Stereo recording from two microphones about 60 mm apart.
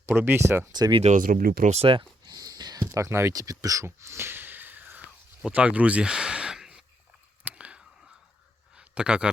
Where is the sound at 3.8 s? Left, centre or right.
Right.